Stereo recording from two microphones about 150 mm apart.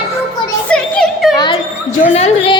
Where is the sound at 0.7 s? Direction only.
5° left (ahead or behind).